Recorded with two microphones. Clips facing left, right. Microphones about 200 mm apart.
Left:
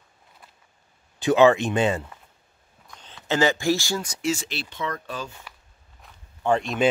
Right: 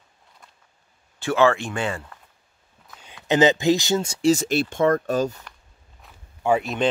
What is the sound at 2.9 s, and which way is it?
Speech, 5° right (ahead or behind).